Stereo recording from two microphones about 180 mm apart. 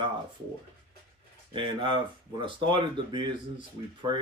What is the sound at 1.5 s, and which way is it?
Speech, 25° right (ahead or behind).